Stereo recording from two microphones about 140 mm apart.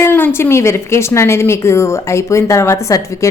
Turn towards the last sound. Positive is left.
turn(degrees=20)  # may be behind; listen again after turning